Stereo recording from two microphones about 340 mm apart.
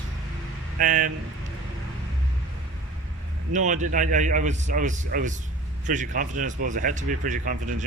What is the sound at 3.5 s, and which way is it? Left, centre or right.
Speech, right.